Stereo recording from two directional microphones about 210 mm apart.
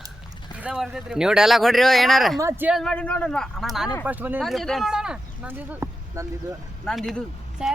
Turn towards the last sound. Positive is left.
turn(degrees=0)  # may be behind; listen again after turning